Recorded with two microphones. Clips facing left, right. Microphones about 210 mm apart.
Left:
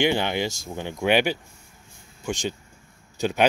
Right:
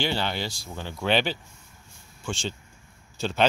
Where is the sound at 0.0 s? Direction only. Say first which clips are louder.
Left 5 dB; 15° left (ahead or behind).